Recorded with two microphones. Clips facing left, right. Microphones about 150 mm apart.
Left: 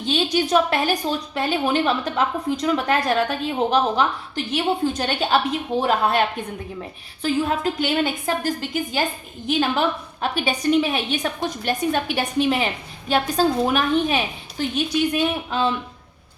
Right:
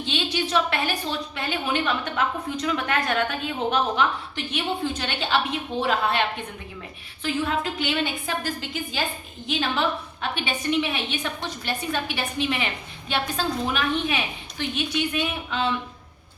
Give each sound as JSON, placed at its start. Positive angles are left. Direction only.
{"t": 0.0, "sound": "a woman's voice", "side_deg": 40}